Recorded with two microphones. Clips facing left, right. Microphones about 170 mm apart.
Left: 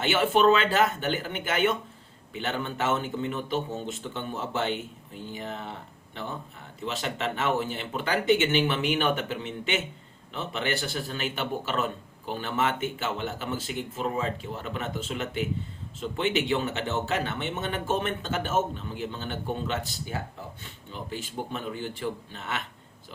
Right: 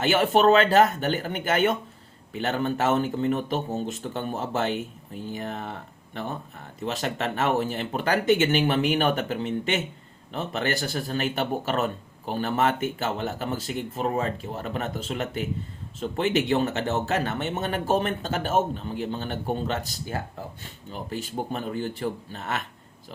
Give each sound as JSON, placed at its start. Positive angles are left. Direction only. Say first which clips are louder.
{"t": 0.0, "sound": "speech", "louder": "right 2 dB", "side_deg": -40}
{"t": 6.8, "sound": "speech", "louder": "right 3 dB", "side_deg": -40}